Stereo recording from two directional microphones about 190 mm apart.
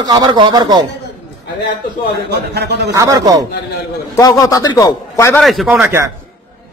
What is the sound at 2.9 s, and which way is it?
Speech, 20° right (ahead or behind).